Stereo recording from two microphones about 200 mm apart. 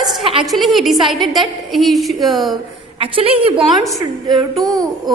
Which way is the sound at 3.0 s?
30° right (ahead or behind).